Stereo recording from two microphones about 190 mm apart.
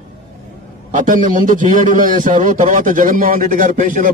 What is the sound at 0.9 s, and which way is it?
A man's voice, 45° right (ahead or behind).